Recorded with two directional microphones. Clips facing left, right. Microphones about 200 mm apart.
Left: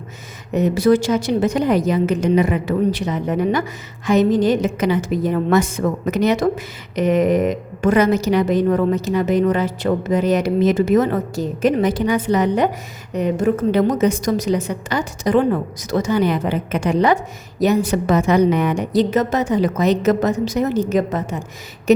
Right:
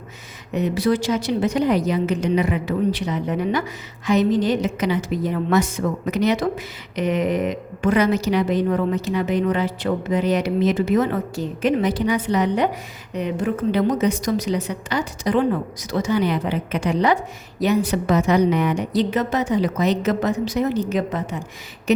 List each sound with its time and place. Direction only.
0.5 s a woman's voice: 45° left (ahead or behind)